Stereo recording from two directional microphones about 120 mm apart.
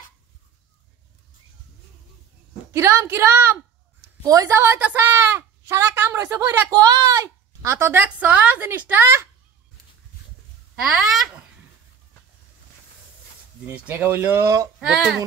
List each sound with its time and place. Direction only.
2.7 s speech: 25° right (ahead or behind)
6.7 s speech: 35° right (ahead or behind)
10.8 s speech: 5° right (ahead or behind)
13.7 s speech: 15° right (ahead or behind)
14.8 s speech: 5° right (ahead or behind)